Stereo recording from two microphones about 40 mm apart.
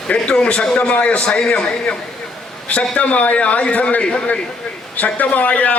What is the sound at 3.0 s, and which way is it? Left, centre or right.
A man's voice, left.